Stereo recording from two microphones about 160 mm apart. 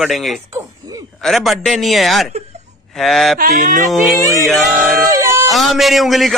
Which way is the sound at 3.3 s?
60° right (ahead or behind).